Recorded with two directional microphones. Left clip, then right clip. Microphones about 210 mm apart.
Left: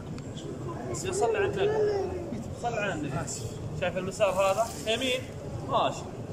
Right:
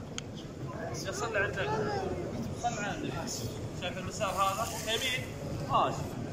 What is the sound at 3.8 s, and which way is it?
Speech, 55° left (ahead or behind).